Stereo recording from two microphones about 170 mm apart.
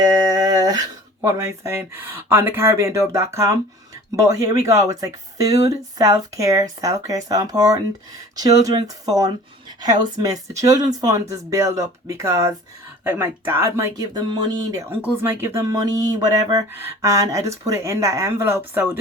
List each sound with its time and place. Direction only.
0.0 s speech: 20° right (ahead or behind)